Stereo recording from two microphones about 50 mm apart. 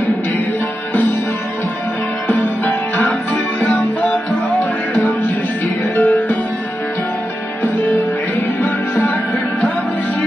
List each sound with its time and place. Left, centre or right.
2.2 s music: left
2.6 s music: left
8.5 s music: left